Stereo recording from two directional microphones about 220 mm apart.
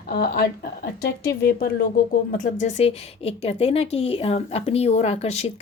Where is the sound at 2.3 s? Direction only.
35° left (ahead or behind).